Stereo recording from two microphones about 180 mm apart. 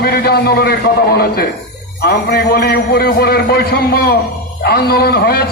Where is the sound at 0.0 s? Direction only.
60° left (ahead or behind).